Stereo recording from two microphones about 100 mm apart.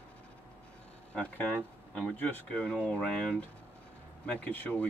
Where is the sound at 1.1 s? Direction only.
10° left (ahead or behind).